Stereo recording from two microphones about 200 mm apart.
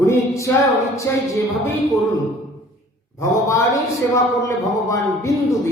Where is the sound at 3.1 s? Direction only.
15° left (ahead or behind).